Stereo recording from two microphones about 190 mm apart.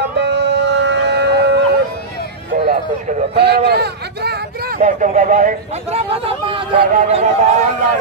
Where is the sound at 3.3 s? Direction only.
60° right (ahead or behind).